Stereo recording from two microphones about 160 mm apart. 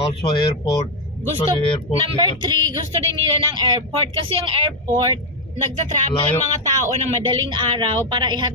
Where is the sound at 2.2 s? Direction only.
30° right (ahead or behind).